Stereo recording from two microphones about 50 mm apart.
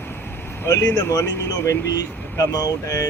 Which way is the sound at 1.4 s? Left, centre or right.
Left.